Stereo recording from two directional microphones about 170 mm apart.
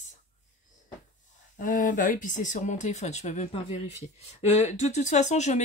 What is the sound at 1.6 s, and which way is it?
Speech, 50° left (ahead or behind).